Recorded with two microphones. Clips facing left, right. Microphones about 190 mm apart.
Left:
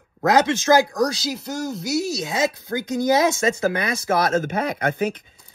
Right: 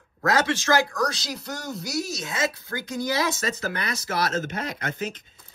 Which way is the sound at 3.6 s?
50° left (ahead or behind).